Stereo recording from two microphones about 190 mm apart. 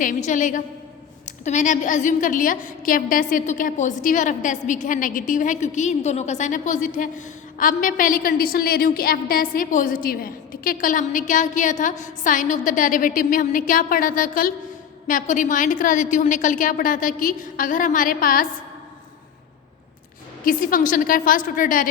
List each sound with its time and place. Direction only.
0.0 s a woman's voice: 40° left (ahead or behind)
20.4 s a woman's voice: 45° left (ahead or behind)